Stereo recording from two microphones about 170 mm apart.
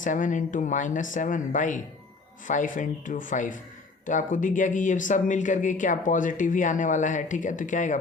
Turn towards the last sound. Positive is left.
turn(degrees=50)  # may be behind; listen again after turning